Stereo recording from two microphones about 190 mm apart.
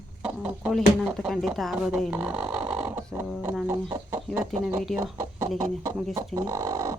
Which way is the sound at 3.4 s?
10° right (ahead or behind).